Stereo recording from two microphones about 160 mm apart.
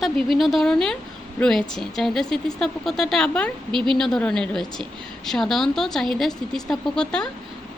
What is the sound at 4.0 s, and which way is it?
A woman's voice, 5° left (ahead or behind).